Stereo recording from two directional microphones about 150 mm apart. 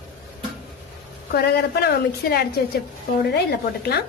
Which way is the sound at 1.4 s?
90° left.